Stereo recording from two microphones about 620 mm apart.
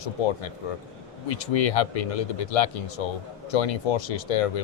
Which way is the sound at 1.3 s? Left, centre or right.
Left.